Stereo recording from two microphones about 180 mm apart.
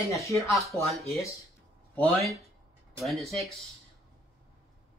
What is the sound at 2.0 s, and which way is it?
Speech, 5° left (ahead or behind).